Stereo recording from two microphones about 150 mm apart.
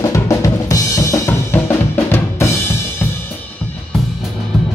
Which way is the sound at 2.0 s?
15° left (ahead or behind).